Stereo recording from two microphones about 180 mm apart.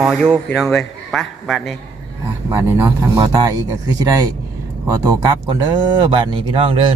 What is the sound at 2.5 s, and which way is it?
Speech, 15° right (ahead or behind).